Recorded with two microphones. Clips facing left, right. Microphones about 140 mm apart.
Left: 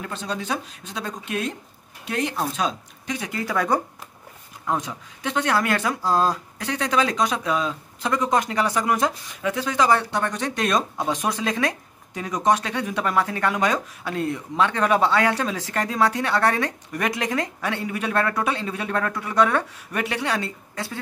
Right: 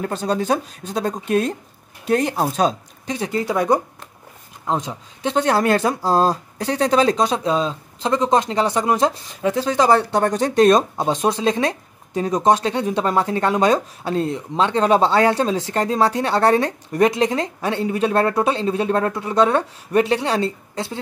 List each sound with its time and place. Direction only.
0.0 s speech: 40° right (ahead or behind); by 21.0 s 25° right (ahead or behind)